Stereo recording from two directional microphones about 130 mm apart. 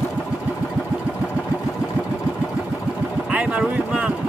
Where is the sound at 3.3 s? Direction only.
10° right (ahead or behind).